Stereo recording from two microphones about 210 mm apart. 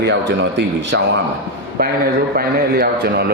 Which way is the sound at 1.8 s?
45° right (ahead or behind).